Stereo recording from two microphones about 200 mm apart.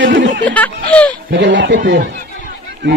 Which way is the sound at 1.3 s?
60° right (ahead or behind).